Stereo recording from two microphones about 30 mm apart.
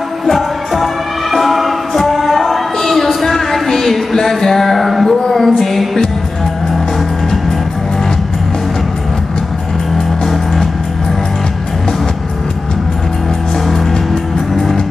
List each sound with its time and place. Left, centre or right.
1.3 s music: centre
9.9 s music: centre